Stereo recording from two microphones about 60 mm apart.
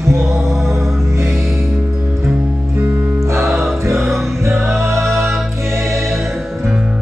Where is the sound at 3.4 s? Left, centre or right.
Centre.